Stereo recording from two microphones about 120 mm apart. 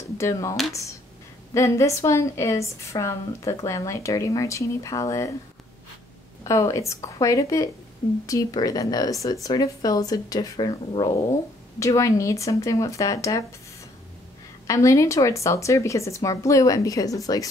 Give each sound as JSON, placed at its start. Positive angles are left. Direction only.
{"t": 0.2, "sound": "a woman's voice", "side_deg": 25}
{"t": 6.4, "sound": "a woman's voice", "side_deg": 25}
{"t": 14.7, "sound": "a woman's voice", "side_deg": 25}